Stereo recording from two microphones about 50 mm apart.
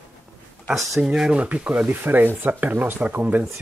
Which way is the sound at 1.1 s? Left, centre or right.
Centre.